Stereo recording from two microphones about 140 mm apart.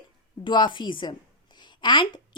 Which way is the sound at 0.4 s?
35° left (ahead or behind).